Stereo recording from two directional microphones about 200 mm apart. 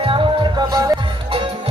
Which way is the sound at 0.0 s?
25° right (ahead or behind).